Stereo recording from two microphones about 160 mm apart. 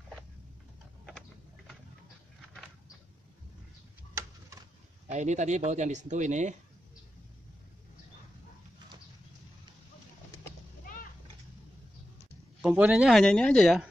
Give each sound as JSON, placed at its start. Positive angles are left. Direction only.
{"t": 4.1, "sound": "a sound", "side_deg": -20}
{"t": 5.0, "sound": "speech", "side_deg": -45}
{"t": 12.6, "sound": "speech", "side_deg": -5}
{"t": 13.2, "sound": "speech", "side_deg": 5}